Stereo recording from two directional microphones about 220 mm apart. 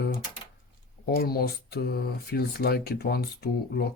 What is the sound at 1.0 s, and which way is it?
Speech, 45° left (ahead or behind).